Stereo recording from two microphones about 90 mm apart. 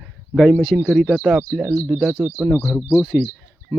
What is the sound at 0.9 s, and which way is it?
Speech, 5° right (ahead or behind).